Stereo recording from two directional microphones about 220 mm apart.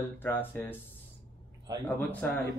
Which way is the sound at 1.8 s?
10° left (ahead or behind).